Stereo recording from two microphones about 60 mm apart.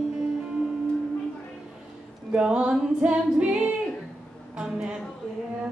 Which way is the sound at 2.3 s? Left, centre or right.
Centre.